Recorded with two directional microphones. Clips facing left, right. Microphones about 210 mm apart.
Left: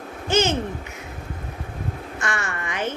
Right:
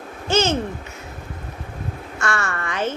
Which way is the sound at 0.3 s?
15° left (ahead or behind).